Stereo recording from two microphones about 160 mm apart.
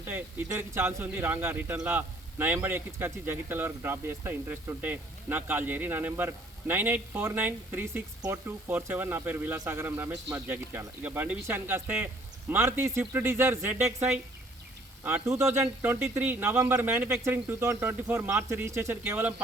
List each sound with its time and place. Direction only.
0.0 s speech: 15° right (ahead or behind)